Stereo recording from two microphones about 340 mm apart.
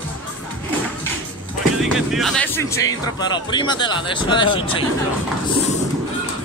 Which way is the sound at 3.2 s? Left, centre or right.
Centre.